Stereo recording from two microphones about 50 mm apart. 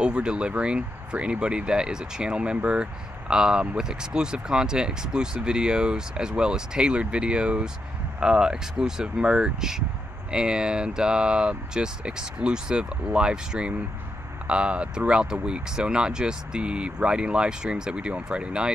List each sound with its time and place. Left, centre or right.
0.0 s speech: centre